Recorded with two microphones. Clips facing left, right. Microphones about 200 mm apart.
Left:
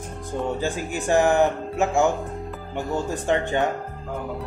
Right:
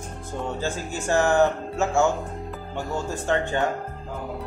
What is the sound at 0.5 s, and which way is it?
Speech, 15° left (ahead or behind).